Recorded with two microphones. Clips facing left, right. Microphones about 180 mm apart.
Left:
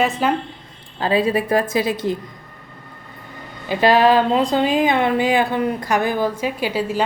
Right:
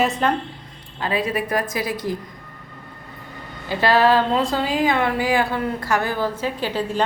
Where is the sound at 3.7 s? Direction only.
15° left (ahead or behind).